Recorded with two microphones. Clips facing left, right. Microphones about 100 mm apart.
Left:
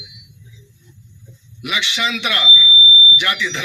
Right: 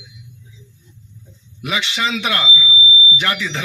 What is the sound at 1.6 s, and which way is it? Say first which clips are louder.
Speech: right 1 dB; 30° right (ahead or behind).